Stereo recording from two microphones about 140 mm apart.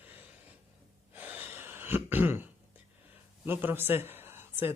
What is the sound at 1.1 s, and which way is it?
Throat clearing, 15° right (ahead or behind).